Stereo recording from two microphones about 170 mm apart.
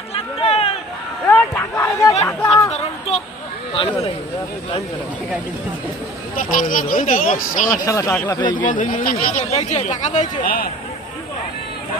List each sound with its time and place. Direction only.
0.1 s a sound: 35° left (ahead or behind)
1.2 s a sound: 10° left (ahead or behind)
2.2 s chatter: 15° left (ahead or behind)
3.7 s speech: 30° left (ahead or behind)
6.3 s speech: 55° left (ahead or behind)
7.7 s speech: 20° left (ahead or behind)
8.6 s speech: 50° left (ahead or behind)
9.4 s speech: 35° left (ahead or behind); by 10.7 s 60° left (ahead or behind)